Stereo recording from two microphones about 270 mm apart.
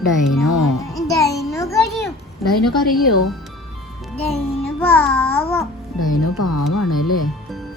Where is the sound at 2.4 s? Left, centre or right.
Centre.